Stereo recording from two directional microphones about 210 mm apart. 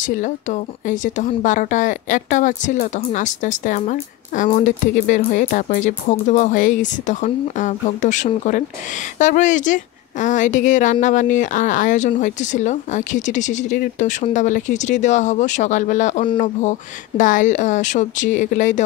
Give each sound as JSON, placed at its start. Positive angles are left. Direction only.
{"t": 0.0, "sound": "a woman's voice", "side_deg": 35}